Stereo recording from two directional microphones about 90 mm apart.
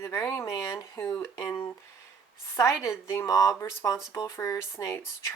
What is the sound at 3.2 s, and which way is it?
Speech, 40° left (ahead or behind).